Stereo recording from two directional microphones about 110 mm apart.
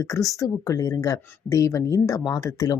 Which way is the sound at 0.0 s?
30° left (ahead or behind).